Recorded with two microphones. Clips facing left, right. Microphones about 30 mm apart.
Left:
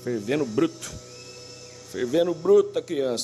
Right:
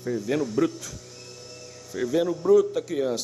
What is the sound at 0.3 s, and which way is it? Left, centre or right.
Speech, centre.